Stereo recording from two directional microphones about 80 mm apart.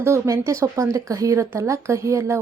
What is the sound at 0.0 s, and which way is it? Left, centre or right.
A woman's voice, right.